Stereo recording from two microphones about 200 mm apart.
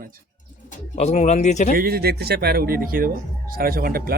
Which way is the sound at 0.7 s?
35° left (ahead or behind).